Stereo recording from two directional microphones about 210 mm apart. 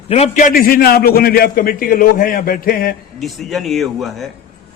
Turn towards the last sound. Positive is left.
turn(degrees=0)  # may be behind; listen again after turning